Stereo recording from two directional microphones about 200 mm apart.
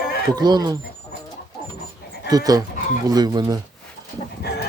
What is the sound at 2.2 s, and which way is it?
Speech, 20° right (ahead or behind).